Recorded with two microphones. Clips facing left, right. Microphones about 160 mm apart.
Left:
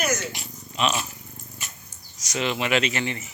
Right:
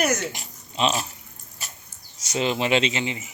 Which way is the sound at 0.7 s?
30° right (ahead or behind).